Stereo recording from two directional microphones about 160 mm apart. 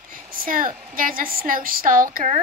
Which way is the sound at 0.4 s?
60° right (ahead or behind).